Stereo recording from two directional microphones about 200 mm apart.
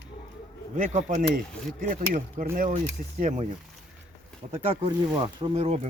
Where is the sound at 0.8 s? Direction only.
40° right (ahead or behind).